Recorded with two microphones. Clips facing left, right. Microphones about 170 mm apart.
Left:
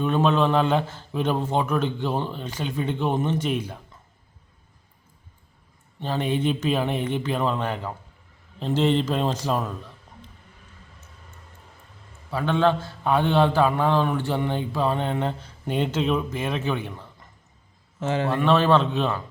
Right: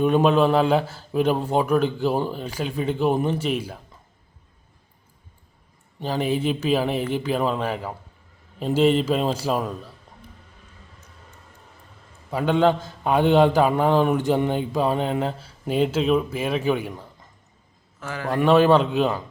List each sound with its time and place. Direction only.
0.0 s a man's voice: 10° right (ahead or behind)
6.0 s a man's voice: 10° right (ahead or behind)
12.3 s a man's voice: 15° right (ahead or behind)
18.0 s speech: 25° left (ahead or behind)
18.3 s a man's voice: 15° right (ahead or behind)